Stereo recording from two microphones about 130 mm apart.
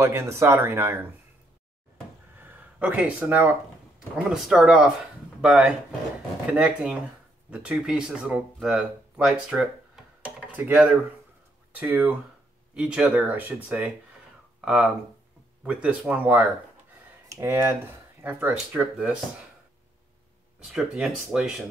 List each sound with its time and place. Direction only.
0.0 s speech: 20° right (ahead or behind)
2.3 s a sound: 15° right (ahead or behind)
4.3 s speech: 5° right (ahead or behind)
17.3 s speech: 20° right (ahead or behind)
20.6 s speech: centre (ahead or behind)